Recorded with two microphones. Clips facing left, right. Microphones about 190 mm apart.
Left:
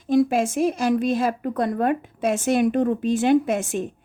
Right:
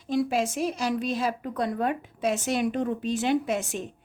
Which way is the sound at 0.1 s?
50° left (ahead or behind).